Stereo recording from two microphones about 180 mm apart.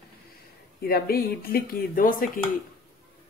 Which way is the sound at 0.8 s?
55° left (ahead or behind).